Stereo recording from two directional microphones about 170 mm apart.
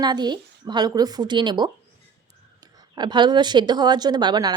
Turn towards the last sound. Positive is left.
turn(degrees=-25)  # may be behind; listen again after turning